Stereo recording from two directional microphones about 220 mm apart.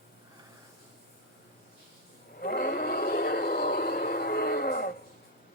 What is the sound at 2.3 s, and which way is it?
Vehicle, 45° left (ahead or behind).